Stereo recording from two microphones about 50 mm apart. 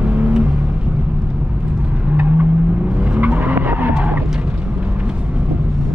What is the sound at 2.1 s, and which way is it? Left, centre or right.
Vehicle, right.